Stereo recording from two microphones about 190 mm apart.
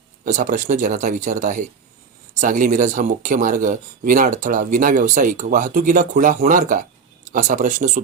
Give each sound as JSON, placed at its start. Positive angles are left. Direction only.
{"t": 0.3, "sound": "speech", "side_deg": -40}